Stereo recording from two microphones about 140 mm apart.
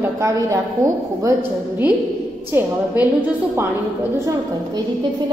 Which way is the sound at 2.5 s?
15° right (ahead or behind).